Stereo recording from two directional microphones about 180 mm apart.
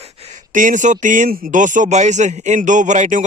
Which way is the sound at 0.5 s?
45° right (ahead or behind).